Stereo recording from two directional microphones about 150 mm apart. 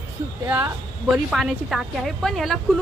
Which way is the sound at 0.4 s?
10° right (ahead or behind).